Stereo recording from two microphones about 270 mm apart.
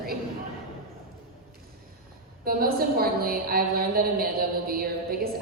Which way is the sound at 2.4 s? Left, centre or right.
Right.